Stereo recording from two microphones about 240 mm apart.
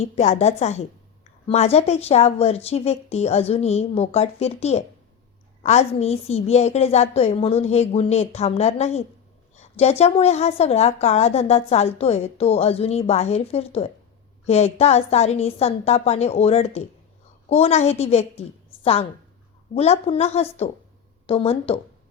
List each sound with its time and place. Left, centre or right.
0.0 s a woman's voice: left
19.7 s a woman's voice: left